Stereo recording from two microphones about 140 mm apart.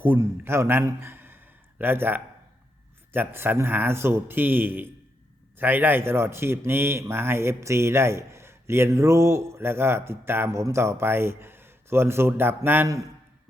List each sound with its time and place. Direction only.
0.0 s a man's voice: 15° right (ahead or behind)